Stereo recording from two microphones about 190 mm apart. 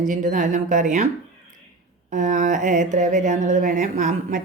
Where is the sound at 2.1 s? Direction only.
40° right (ahead or behind).